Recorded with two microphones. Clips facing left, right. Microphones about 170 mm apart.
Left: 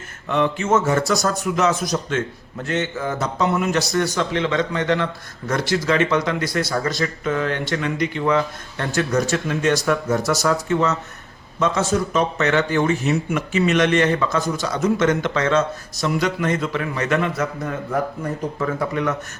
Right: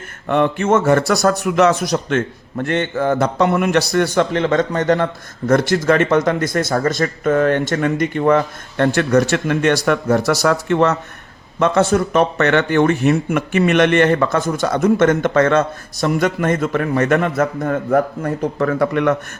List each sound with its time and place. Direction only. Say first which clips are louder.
0.3 s a man's voice: right 4 dB; 55° right (ahead or behind)